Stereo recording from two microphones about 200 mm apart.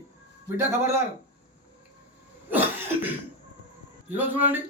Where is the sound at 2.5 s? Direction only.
10° right (ahead or behind).